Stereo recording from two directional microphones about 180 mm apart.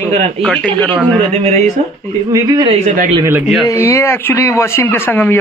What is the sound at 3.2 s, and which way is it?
Speech, 10° right (ahead or behind).